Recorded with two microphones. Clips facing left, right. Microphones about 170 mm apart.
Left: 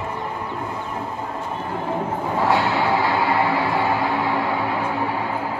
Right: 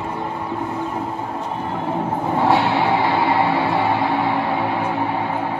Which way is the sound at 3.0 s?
25° right (ahead or behind).